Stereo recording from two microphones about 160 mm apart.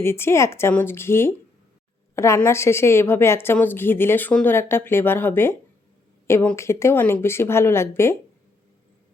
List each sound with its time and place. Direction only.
0.0 s a woman's voice: 15° left (ahead or behind)